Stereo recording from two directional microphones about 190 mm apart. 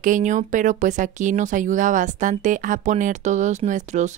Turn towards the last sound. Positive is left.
turn(degrees=-40)  # may be behind; listen again after turning